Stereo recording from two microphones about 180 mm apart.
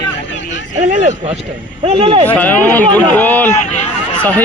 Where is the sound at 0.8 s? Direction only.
45° right (ahead or behind).